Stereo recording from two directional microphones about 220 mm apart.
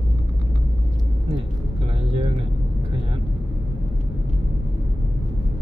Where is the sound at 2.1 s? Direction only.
25° right (ahead or behind).